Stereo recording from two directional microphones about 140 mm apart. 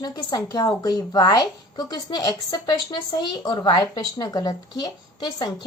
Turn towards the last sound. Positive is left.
turn(degrees=30)  # may be behind; listen again after turning